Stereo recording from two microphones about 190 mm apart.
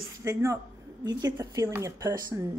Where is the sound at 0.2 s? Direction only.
15° right (ahead or behind).